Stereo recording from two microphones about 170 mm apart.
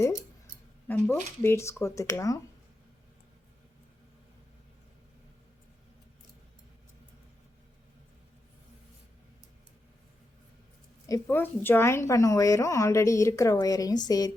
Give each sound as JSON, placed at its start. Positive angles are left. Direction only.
{"t": 0.5, "sound": "speech", "side_deg": 10}
{"t": 11.0, "sound": "a woman's voice", "side_deg": 15}